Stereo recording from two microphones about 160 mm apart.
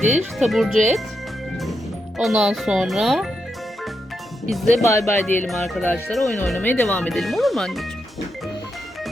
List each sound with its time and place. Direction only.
0.3 s speech: centre (ahead or behind)
2.1 s speech: centre (ahead or behind)
4.4 s speech: centre (ahead or behind)
4.8 s speech: 20° left (ahead or behind)
5.5 s speech: centre (ahead or behind)
6.6 s speech: 10° left (ahead or behind)